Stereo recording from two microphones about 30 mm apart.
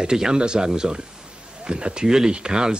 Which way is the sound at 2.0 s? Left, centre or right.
Right.